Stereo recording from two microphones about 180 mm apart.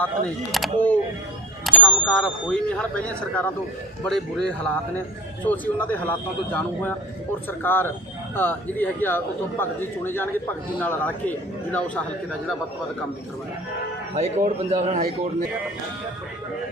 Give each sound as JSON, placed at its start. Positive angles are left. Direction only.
{"t": 0.5, "sound": "a man's voice", "side_deg": 0}
{"t": 14.2, "sound": "a man's voice", "side_deg": -40}